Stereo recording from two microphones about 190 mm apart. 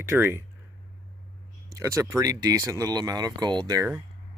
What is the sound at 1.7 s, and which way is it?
Speech, 15° right (ahead or behind).